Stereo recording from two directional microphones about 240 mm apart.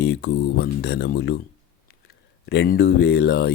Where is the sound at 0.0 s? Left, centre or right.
Left.